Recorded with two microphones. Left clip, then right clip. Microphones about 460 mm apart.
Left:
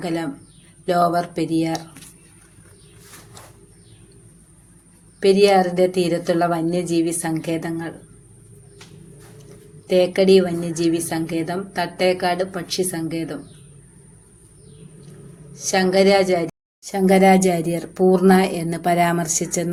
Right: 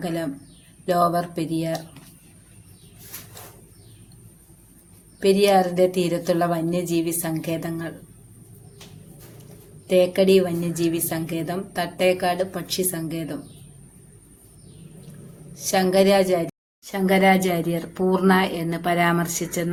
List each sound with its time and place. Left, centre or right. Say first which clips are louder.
0.0 s a woman's voice: left 2 dB; right
5.2 s a woman's voice: left 3 dB; right
9.8 s a woman's voice: left 2 dB; right
15.5 s a woman's voice: left 2 dB; right
16.8 s speech: left 3 dB; right